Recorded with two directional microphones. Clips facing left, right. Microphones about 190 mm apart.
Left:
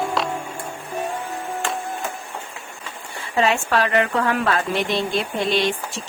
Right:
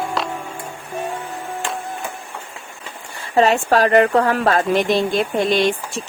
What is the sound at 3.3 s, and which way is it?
Speech, 40° right (ahead or behind).